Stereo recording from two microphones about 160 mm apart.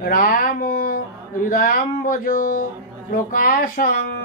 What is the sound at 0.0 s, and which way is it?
Speech, 60° left (ahead or behind).